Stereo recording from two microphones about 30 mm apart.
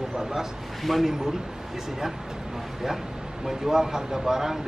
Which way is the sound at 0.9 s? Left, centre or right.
Centre.